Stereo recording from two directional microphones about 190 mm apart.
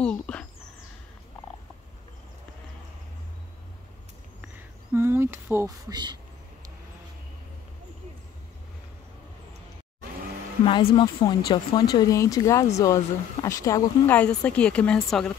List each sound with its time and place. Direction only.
0.0 s speech: 5° left (ahead or behind)
4.9 s a sound: 15° right (ahead or behind)
10.6 s speech: 30° left (ahead or behind); by 15.3 s centre (ahead or behind)